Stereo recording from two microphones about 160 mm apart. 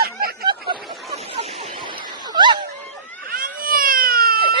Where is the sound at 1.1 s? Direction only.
40° right (ahead or behind).